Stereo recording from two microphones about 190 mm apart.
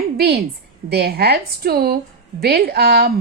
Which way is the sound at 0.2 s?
55° right (ahead or behind).